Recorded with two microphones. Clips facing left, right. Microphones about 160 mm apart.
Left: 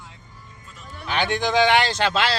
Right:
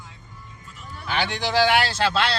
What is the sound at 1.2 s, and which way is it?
Speech, 5° right (ahead or behind).